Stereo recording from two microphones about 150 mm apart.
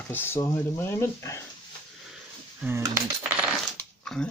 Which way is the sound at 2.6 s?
15° right (ahead or behind).